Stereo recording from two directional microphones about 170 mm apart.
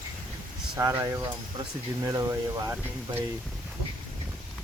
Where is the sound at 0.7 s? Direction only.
15° right (ahead or behind).